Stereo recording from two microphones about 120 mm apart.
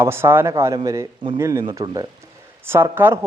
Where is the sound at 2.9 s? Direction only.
20° right (ahead or behind).